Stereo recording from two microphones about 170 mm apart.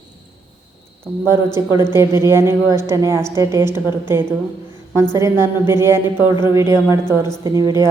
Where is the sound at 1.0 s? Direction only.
15° right (ahead or behind).